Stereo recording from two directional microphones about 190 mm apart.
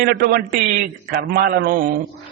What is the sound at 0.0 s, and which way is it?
A man's voice, 55° right (ahead or behind).